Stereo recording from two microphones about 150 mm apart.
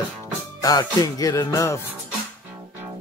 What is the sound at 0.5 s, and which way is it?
Music, 25° left (ahead or behind).